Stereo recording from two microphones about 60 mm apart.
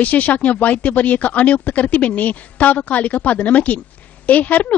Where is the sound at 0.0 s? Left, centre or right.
Left.